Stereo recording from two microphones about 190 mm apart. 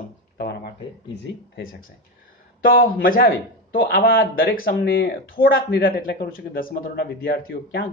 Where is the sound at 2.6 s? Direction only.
50° left (ahead or behind).